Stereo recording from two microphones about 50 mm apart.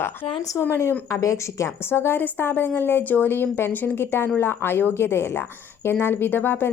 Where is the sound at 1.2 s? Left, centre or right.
Left.